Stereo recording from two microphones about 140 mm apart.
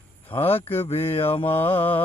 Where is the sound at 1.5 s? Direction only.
15° left (ahead or behind).